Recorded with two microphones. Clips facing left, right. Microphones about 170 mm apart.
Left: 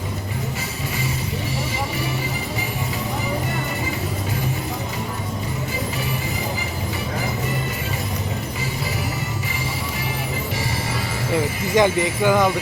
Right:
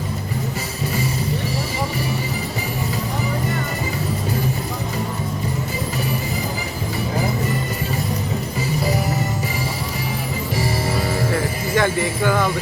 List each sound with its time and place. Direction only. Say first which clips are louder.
11.7 s speech: left 2 dB; 20° left (ahead or behind)